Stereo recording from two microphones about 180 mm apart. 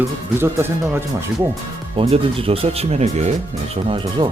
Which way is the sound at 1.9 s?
30° right (ahead or behind).